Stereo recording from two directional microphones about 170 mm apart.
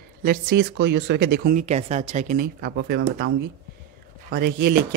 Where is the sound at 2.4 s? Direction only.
65° right (ahead or behind).